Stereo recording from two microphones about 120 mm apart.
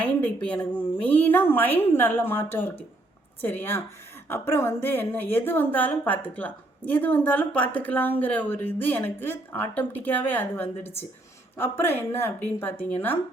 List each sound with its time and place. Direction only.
0.0 s a woman's voice: 10° left (ahead or behind)